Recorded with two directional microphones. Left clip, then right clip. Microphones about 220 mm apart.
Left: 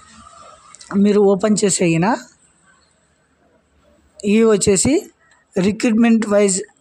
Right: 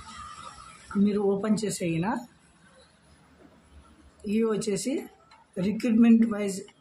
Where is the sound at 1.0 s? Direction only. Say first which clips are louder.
Left 13 dB; 40° left (ahead or behind).